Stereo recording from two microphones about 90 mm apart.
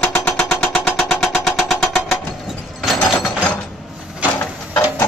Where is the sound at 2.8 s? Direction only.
Centre (ahead or behind).